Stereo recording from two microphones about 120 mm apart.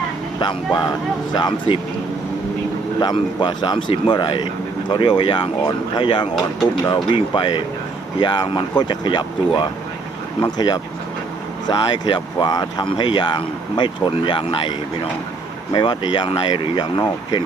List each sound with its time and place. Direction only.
0.3 s speech: 35° left (ahead or behind)
3.0 s speech: 40° left (ahead or behind)
15.7 s speech: 40° left (ahead or behind)